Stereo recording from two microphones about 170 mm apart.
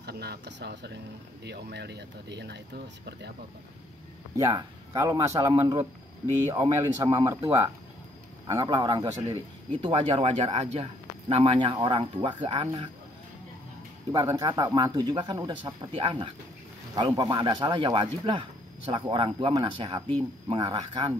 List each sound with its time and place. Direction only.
0.0 s speech: 70° right (ahead or behind)
4.4 s speech: 20° right (ahead or behind)
14.1 s speech: 20° right (ahead or behind); by 16.3 s 35° right (ahead or behind)
16.9 s speech: 25° right (ahead or behind)